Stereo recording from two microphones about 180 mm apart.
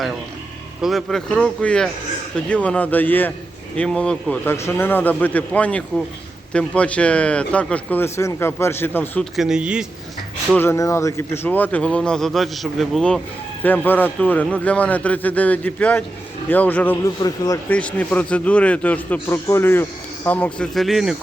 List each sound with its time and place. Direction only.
0.8 s speech: centre (ahead or behind)
9.3 s speech: 5° right (ahead or behind)
10.5 s speech: 15° left (ahead or behind)
17.2 s a man's voice: 20° left (ahead or behind)
17.7 s speech: 5° left (ahead or behind)